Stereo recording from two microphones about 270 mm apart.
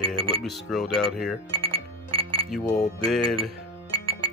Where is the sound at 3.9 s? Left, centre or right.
Centre.